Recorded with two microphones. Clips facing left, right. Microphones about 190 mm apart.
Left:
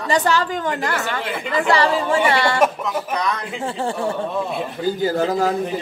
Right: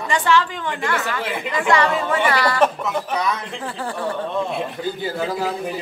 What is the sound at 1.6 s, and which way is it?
A woman's voice, 35° left (ahead or behind).